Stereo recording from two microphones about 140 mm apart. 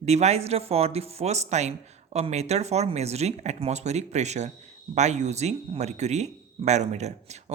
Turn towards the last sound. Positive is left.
turn(degrees=-50)  # may be behind; listen again after turning